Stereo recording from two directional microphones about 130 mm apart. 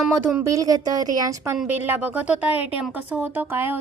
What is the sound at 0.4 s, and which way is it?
A woman's voice, 25° right (ahead or behind).